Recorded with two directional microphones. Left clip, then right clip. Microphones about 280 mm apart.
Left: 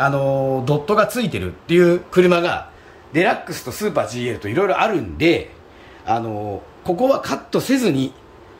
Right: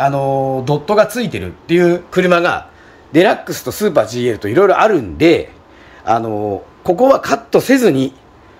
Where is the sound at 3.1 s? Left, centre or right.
Right.